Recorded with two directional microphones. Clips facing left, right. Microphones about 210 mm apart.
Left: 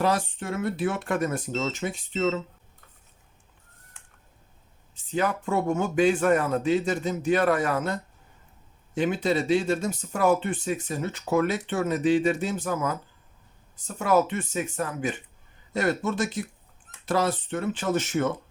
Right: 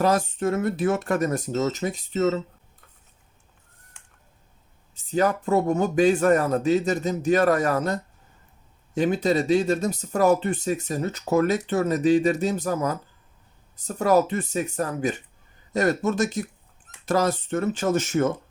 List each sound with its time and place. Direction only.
0.0 s speech: 45° right (ahead or behind)
5.1 s speech: 40° right (ahead or behind)
9.0 s speech: 40° right (ahead or behind)